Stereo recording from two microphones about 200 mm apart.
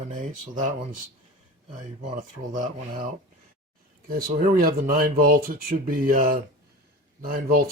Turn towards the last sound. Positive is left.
turn(degrees=-45)  # may be behind; listen again after turning